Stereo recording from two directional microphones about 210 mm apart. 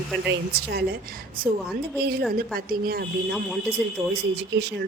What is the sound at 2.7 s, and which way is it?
Speech, 45° right (ahead or behind).